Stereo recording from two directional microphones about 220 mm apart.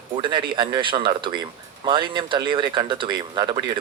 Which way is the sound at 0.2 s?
20° right (ahead or behind).